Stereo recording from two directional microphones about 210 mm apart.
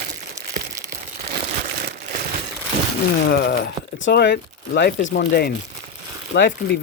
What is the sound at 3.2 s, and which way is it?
Speech, 50° left (ahead or behind).